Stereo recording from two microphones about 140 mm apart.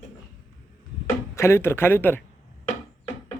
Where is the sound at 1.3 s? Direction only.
20° left (ahead or behind).